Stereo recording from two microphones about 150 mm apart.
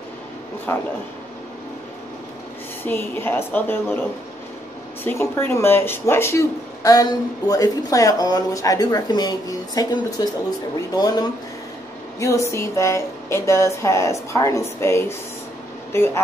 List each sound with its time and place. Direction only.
0.7 s a woman's voice: 15° left (ahead or behind)
2.8 s a woman's voice: 15° left (ahead or behind)
5.0 s speech: 15° left (ahead or behind)
12.2 s a woman's voice: 20° left (ahead or behind)